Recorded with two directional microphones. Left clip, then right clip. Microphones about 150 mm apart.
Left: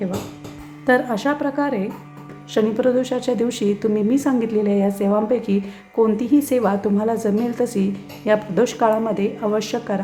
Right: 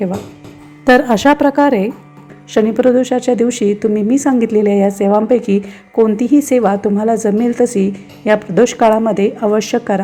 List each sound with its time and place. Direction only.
0.9 s speech: 50° right (ahead or behind)
2.5 s a woman's voice: 35° right (ahead or behind)